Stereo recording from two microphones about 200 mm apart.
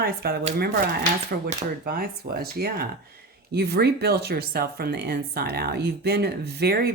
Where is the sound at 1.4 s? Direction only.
50° right (ahead or behind).